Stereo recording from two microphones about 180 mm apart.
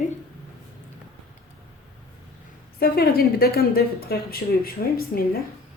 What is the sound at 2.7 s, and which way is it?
Speech, 60° left (ahead or behind).